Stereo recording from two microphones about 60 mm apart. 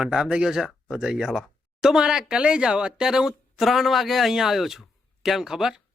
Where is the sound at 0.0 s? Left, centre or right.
Centre.